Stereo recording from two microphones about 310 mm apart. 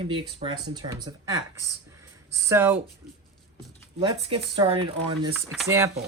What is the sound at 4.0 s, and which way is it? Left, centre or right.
Speech, centre.